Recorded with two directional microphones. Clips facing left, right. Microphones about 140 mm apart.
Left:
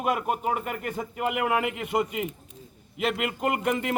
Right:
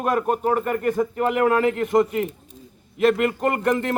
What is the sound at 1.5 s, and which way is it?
Speech, 10° left (ahead or behind).